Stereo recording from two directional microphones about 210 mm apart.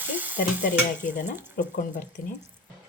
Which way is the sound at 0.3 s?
40° left (ahead or behind).